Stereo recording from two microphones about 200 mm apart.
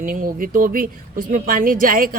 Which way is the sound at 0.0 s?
45° right (ahead or behind).